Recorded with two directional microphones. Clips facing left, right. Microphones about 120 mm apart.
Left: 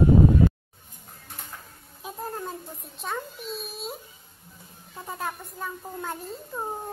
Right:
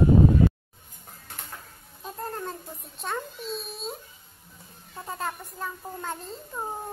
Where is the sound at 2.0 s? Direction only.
5° left (ahead or behind).